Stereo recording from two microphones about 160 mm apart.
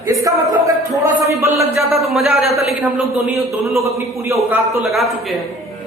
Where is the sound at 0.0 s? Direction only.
20° right (ahead or behind).